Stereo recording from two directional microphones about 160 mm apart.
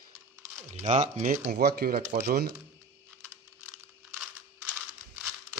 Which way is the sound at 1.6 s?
75° right (ahead or behind).